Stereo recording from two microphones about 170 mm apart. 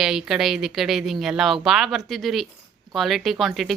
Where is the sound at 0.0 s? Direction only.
5° right (ahead or behind).